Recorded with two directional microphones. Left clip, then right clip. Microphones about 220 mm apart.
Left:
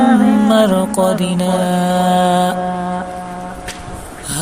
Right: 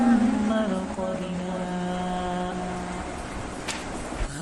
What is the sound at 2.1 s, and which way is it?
Mantra, 50° left (ahead or behind).